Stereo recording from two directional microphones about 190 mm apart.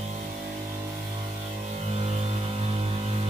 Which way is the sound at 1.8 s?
35° right (ahead or behind).